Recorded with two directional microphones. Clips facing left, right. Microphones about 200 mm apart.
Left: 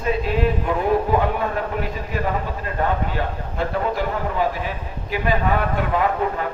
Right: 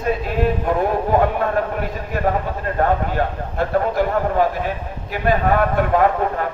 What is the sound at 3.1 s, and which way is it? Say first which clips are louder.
Speech: right 4 dB; 50° right (ahead or behind).